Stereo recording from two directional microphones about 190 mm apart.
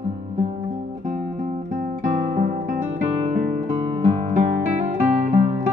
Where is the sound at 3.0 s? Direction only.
35° right (ahead or behind).